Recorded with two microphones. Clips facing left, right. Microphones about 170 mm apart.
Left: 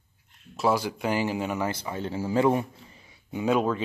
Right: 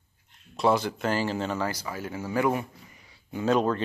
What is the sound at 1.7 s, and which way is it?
A man's voice, 25° left (ahead or behind).